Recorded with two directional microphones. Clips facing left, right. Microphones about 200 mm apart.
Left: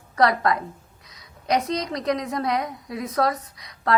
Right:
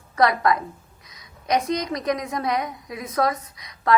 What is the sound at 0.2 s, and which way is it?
A woman's voice, 35° left (ahead or behind).